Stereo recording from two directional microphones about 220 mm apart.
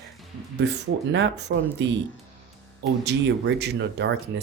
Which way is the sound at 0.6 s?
55° right (ahead or behind).